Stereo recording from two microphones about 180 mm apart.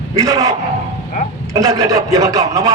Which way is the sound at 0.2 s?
20° right (ahead or behind).